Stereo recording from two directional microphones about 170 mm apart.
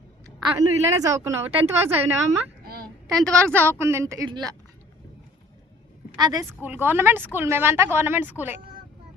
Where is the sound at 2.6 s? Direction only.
65° right (ahead or behind).